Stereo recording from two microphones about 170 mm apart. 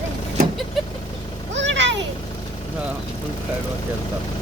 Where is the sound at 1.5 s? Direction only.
90° right.